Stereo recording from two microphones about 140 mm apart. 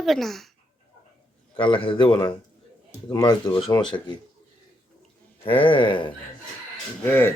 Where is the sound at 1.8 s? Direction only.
35° left (ahead or behind).